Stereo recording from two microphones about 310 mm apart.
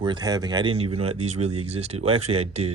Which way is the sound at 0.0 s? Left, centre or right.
Centre.